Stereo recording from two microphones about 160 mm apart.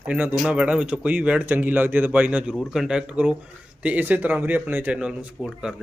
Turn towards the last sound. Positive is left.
turn(degrees=-5)  # may be behind; listen again after turning